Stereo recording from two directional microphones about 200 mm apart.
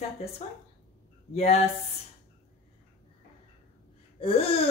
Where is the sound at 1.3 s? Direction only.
30° left (ahead or behind).